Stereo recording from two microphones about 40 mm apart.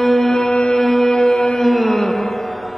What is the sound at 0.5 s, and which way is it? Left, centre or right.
Music, left.